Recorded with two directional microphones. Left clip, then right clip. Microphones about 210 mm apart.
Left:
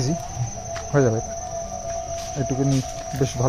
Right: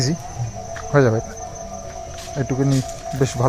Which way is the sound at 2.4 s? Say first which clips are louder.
Right 3 dB; 15° right (ahead or behind).